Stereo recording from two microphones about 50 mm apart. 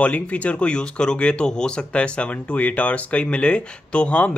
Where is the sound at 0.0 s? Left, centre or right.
Left.